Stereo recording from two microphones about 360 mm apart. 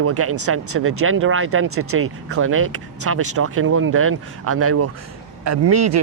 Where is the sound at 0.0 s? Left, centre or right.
Right.